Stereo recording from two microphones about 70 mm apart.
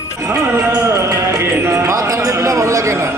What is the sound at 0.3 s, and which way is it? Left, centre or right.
Music, right.